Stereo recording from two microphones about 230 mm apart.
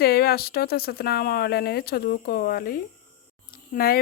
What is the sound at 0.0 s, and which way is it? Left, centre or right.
Speech, left.